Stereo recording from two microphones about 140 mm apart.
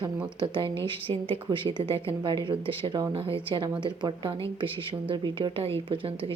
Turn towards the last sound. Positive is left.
turn(degrees=-40)  # may be behind; listen again after turning